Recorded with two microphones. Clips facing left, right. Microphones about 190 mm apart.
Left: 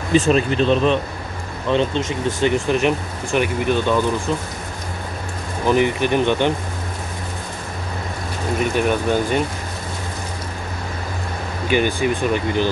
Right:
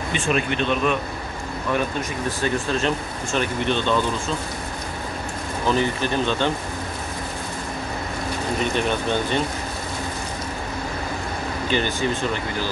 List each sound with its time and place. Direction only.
0.1 s speech: 35° left (ahead or behind); by 4.4 s 10° left (ahead or behind)
5.7 s speech: 15° left (ahead or behind)
8.7 s speech: 10° left (ahead or behind)
11.6 s speech: 10° left (ahead or behind)